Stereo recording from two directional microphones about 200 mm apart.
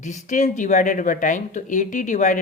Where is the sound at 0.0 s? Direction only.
40° left (ahead or behind).